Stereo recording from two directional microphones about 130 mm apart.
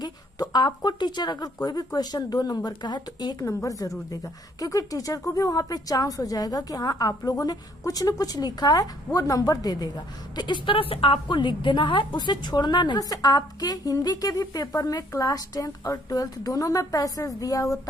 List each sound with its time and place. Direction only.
0.0 s a woman's voice: 35° left (ahead or behind)